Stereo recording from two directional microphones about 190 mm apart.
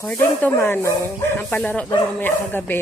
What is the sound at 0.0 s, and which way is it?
Speech, 5° left (ahead or behind).